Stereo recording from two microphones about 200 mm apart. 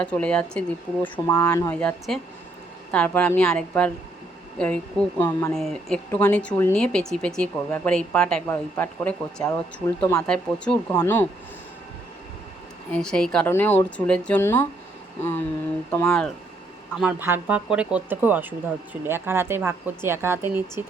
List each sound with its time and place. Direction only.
0.0 s speech: 5° left (ahead or behind)
1.7 s speech: 5° left (ahead or behind)
10.2 s speech: 5° left (ahead or behind)
12.9 s speech: 5° left (ahead or behind)
17.0 s speech: 10° right (ahead or behind)